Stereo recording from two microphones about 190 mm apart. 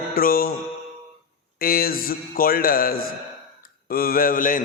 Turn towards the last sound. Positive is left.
turn(degrees=45)  # may be behind; listen again after turning